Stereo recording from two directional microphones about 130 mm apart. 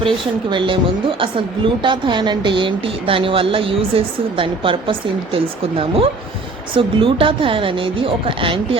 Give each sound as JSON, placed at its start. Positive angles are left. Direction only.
{"t": 0.5, "sound": "a woman's voice", "side_deg": -40}